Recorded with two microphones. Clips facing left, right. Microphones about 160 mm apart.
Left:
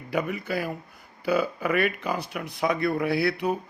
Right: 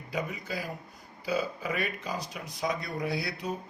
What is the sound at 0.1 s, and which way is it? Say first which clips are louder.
Speech: left 7 dB; 65° left (ahead or behind).